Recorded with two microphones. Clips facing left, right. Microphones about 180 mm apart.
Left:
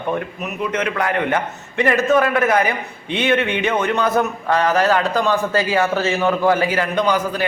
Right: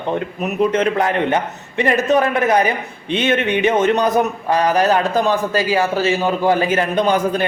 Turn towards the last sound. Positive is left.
turn(degrees=-25)  # may be behind; listen again after turning